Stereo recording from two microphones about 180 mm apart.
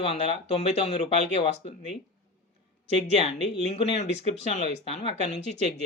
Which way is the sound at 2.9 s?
35° left (ahead or behind).